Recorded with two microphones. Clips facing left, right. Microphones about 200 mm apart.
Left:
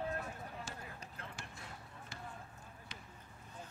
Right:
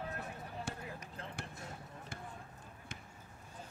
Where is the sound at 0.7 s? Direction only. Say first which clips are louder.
Right 5 dB; 60° right (ahead or behind).